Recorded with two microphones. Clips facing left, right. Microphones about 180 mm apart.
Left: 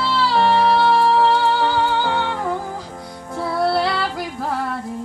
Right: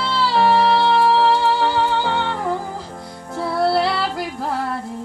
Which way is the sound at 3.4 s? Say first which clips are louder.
Right 1 dB; centre (ahead or behind).